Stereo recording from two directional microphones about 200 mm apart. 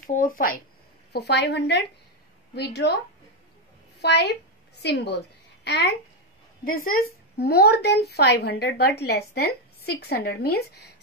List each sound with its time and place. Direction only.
0.0 s a woman's voice: 45° left (ahead or behind)
4.0 s a woman's voice: 55° left (ahead or behind)
6.6 s speech: 45° left (ahead or behind)